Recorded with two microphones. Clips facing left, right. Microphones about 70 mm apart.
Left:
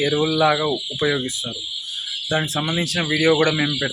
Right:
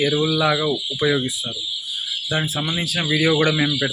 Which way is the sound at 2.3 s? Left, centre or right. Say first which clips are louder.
Left 2 dB; centre.